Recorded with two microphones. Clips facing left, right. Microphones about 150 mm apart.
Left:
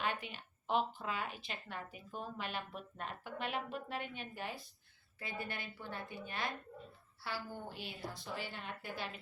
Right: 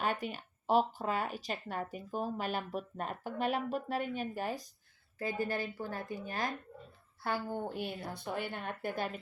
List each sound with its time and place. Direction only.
0.0 s speech: 45° right (ahead or behind)